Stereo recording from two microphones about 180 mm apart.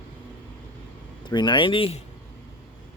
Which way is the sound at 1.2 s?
25° left (ahead or behind).